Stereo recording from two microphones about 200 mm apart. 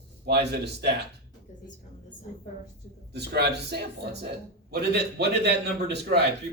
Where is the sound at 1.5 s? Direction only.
40° left (ahead or behind).